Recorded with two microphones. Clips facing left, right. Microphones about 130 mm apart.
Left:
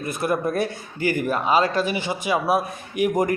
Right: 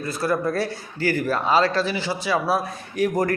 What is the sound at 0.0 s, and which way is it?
A man's voice, 20° left (ahead or behind).